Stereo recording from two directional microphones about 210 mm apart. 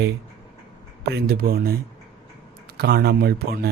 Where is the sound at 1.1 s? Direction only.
45° right (ahead or behind).